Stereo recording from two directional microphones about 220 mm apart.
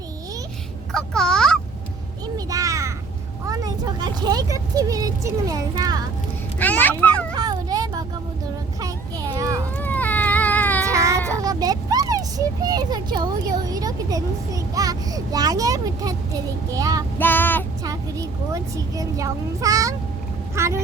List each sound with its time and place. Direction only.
0.9 s fowl: 5° left (ahead or behind)
2.2 s a sound: 15° right (ahead or behind)
3.4 s speech: 15° right (ahead or behind)
6.6 s a child's voice: 10° left (ahead or behind)
7.3 s a sound: 15° right (ahead or behind)
9.7 s baby cry: 10° left (ahead or behind)
10.9 s child singing: 15° right (ahead or behind)
11.4 s a child's voice: 15° right (ahead or behind)
17.2 s child singing: 10° left (ahead or behind)
17.8 s speech: 15° right (ahead or behind)